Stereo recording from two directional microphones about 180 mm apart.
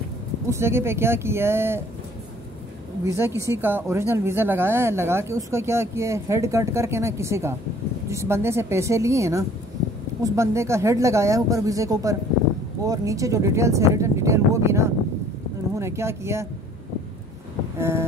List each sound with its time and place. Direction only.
0.5 s speech: 15° right (ahead or behind)
3.0 s speech: 15° right (ahead or behind)
17.7 s speech: 15° right (ahead or behind)